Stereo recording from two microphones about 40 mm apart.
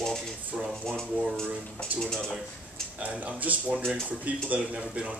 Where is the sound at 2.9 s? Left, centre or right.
Right.